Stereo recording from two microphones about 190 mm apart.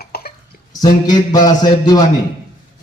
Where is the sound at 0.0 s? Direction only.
55° left (ahead or behind).